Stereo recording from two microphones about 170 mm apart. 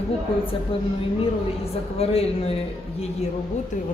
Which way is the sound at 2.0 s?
35° left (ahead or behind).